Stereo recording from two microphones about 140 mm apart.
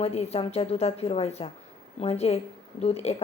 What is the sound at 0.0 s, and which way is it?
Speech, 50° left (ahead or behind).